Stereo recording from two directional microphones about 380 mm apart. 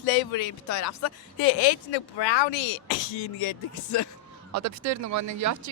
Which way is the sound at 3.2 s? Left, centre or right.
Left.